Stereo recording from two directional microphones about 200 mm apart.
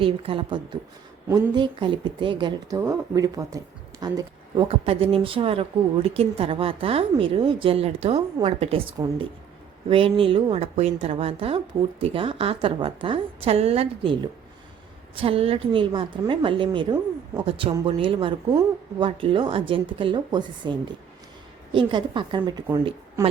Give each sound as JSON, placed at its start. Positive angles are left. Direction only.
{"t": 0.0, "sound": "a woman's voice", "side_deg": -25}